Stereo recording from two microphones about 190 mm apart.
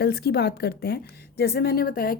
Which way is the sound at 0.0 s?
60° left (ahead or behind).